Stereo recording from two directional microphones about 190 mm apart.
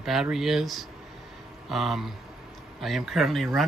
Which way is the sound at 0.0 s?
Centre (ahead or behind).